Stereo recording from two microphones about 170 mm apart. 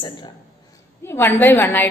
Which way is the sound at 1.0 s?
15° left (ahead or behind).